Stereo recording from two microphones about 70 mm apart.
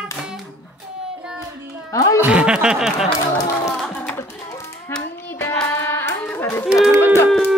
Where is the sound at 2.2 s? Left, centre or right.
Centre.